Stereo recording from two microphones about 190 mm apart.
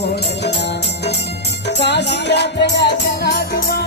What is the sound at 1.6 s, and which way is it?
Music, 65° left (ahead or behind).